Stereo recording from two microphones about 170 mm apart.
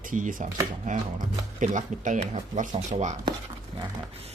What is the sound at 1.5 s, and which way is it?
Speech, 45° right (ahead or behind).